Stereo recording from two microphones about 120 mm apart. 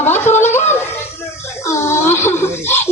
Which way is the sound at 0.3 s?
90° left.